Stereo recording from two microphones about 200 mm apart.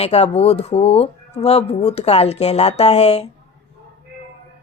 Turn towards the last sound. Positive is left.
turn(degrees=30)  # may be behind; listen again after turning